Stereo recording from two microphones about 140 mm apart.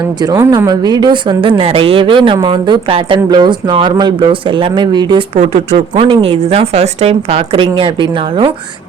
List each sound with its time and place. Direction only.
0.2 s speech: 30° right (ahead or behind)
5.4 s a woman's voice: 50° right (ahead or behind)